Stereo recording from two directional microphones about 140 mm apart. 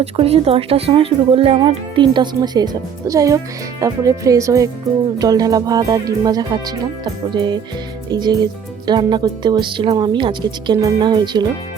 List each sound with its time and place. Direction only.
0.0 s speech: 45° right (ahead or behind)